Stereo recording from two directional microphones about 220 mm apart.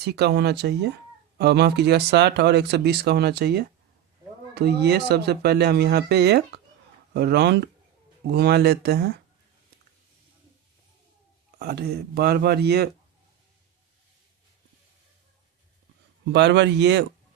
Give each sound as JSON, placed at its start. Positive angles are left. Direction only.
{"t": 0.0, "sound": "speech", "side_deg": -50}
{"t": 11.6, "sound": "speech", "side_deg": -45}
{"t": 16.3, "sound": "speech", "side_deg": -50}